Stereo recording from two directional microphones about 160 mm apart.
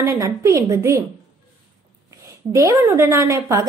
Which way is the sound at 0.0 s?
20° right (ahead or behind).